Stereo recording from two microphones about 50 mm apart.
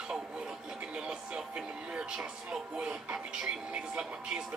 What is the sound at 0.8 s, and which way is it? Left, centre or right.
Television, centre.